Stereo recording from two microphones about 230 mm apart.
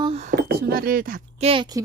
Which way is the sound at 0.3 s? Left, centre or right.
Right.